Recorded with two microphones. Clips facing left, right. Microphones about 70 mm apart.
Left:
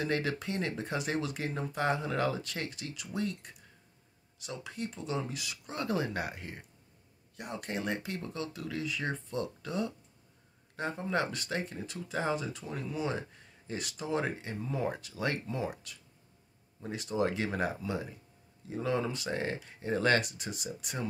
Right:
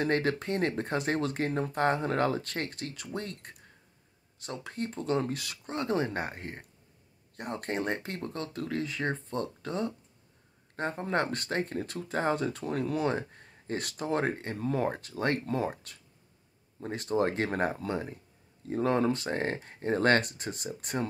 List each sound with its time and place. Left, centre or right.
0.0 s speech: right
5.8 s speech: right
14.6 s speech: right
14.9 s speech: right
15.4 s speech: right
15.7 s speech: right